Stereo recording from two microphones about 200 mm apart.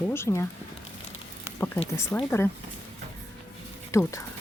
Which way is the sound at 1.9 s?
15° left (ahead or behind).